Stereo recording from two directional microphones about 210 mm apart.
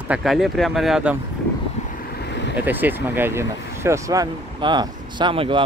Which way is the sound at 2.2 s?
55° left (ahead or behind).